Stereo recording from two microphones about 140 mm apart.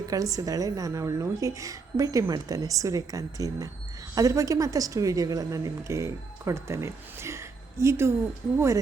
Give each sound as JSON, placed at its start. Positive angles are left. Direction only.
{"t": 0.1, "sound": "a woman's voice", "side_deg": -25}